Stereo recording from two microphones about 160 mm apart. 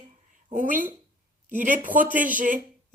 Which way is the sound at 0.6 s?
55° right (ahead or behind).